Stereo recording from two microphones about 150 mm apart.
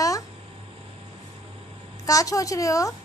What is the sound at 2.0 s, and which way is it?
Speech, 20° left (ahead or behind).